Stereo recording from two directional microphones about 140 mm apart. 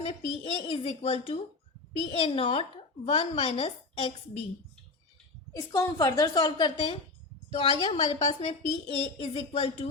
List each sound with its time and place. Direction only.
0.0 s a woman's voice: 45° left (ahead or behind)
5.5 s a woman's voice: 25° left (ahead or behind)
7.5 s a woman's voice: 50° left (ahead or behind)